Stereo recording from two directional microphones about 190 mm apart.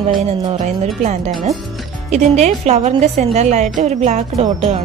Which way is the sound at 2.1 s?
35° right (ahead or behind).